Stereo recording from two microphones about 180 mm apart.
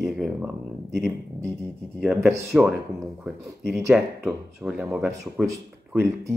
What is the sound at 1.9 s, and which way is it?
Speech, centre (ahead or behind).